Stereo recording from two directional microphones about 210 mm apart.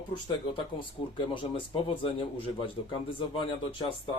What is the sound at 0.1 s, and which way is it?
Speech, 25° left (ahead or behind).